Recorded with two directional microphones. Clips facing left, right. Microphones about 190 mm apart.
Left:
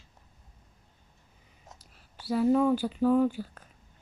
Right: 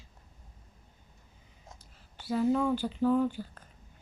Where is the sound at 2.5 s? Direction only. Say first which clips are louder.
Left 6 dB; 45° left (ahead or behind).